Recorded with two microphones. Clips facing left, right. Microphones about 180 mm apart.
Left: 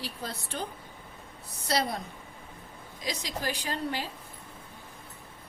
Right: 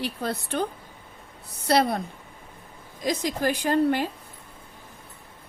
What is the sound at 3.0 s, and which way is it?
A woman's voice, 50° right (ahead or behind).